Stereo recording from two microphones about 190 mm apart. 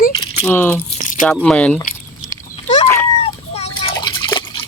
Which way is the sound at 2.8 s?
10° left (ahead or behind).